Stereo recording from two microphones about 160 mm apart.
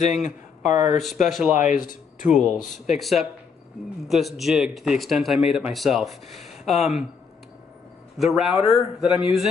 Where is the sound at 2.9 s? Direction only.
Centre (ahead or behind).